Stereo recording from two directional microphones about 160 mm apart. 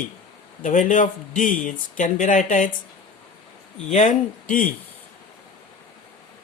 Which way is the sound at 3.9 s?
50° left (ahead or behind).